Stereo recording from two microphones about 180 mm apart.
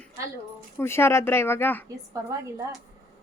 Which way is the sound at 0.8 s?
15° left (ahead or behind).